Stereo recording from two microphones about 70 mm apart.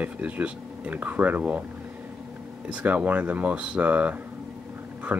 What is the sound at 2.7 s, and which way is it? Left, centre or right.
Speech, right.